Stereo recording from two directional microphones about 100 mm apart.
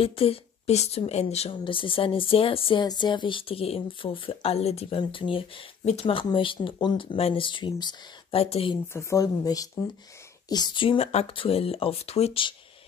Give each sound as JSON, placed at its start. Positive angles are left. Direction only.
{"t": 0.0, "sound": "speech", "side_deg": 75}
{"t": 1.6, "sound": "speech", "side_deg": 60}
{"t": 2.8, "sound": "speech", "side_deg": 45}
{"t": 7.2, "sound": "speech", "side_deg": 70}
{"t": 8.4, "sound": "speech", "side_deg": 80}
{"t": 8.8, "sound": "speech", "side_deg": 25}
{"t": 10.5, "sound": "speech", "side_deg": 50}